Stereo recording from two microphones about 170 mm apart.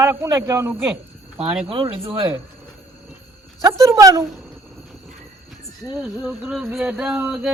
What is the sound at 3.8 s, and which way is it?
Speech, 20° right (ahead or behind).